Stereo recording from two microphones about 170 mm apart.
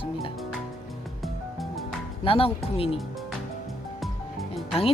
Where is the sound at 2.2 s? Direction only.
35° left (ahead or behind).